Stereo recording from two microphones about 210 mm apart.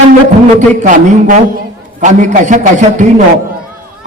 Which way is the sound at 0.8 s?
40° right (ahead or behind).